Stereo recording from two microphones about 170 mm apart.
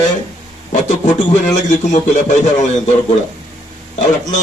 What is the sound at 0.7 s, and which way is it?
A man's voice, 45° left (ahead or behind).